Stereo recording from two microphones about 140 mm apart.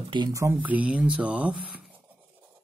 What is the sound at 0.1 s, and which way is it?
Speech, 25° right (ahead or behind).